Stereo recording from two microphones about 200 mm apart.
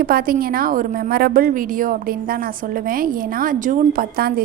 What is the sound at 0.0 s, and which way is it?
A woman's voice, 45° right (ahead or behind).